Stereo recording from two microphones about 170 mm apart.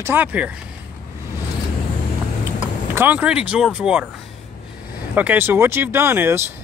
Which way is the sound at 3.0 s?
10° right (ahead or behind).